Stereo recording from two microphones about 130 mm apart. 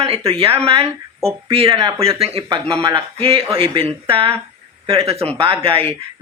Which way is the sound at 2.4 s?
35° right (ahead or behind).